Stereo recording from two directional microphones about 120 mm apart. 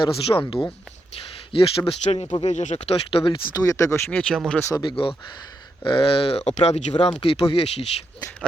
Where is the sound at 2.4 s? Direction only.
80° left.